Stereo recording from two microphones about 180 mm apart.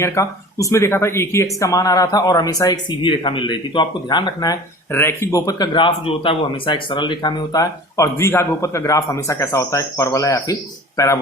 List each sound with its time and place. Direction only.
0.0 s speech: 15° left (ahead or behind)